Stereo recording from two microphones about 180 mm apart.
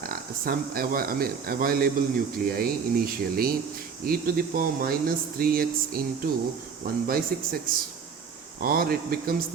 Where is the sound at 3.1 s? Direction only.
55° right (ahead or behind).